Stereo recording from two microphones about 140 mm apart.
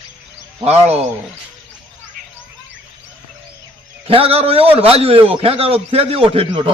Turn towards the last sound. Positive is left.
turn(degrees=-40)  # may be behind; listen again after turning